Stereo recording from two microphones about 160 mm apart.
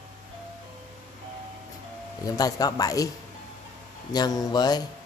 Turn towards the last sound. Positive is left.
turn(degrees=25)  # may be behind; listen again after turning